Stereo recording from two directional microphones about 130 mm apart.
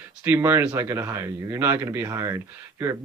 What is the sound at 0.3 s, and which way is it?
Speech, 20° right (ahead or behind).